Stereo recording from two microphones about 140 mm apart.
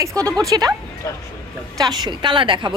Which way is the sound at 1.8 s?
30° right (ahead or behind).